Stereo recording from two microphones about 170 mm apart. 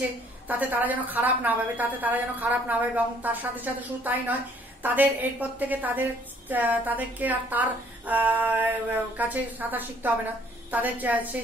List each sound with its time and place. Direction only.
0.5 s speech: 10° right (ahead or behind)